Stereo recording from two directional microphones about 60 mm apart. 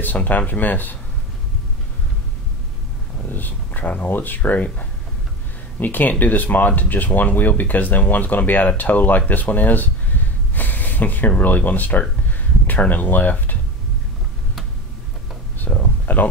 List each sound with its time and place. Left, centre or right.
0.0 s speech: left
3.3 s speech: left
15.6 s a sound: left